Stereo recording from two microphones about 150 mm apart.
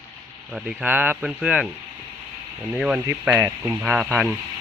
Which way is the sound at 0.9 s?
10° right (ahead or behind).